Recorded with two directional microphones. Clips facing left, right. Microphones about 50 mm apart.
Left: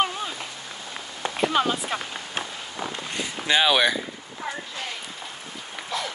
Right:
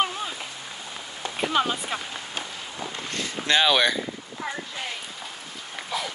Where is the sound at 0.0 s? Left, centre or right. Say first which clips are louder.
Left 1 dB; centre.